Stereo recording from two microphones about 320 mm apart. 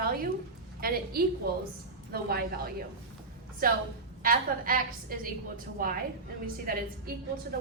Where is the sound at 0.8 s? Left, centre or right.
Right.